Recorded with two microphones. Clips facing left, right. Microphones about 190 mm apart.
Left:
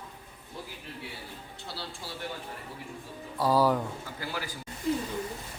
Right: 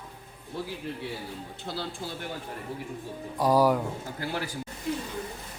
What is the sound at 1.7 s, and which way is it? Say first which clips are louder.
Speech: right 6 dB; 55° right (ahead or behind).